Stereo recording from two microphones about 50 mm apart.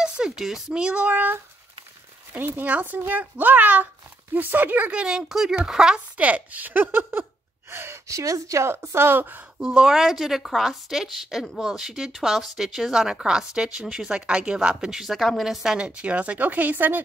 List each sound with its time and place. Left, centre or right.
0.2 s speech: centre
2.3 s speech: right
5.0 s speech: centre
6.1 s speech: right
7.7 s speech: right
8.1 s speech: right
8.9 s speech: right
9.8 s speech: centre
14.1 s speech: centre
15.1 s a woman's voice: centre
15.4 s speech: centre
15.9 s speech: right